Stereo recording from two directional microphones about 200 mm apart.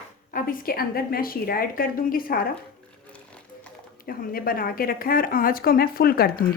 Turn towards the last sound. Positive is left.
turn(degrees=50)  # may be behind; listen again after turning